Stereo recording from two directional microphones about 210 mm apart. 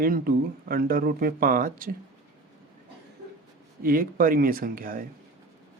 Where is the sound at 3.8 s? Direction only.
40° right (ahead or behind).